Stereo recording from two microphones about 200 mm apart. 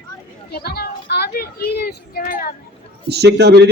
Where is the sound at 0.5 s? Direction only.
55° left (ahead or behind).